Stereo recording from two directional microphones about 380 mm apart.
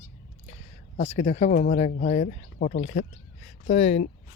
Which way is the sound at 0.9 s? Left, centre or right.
Centre.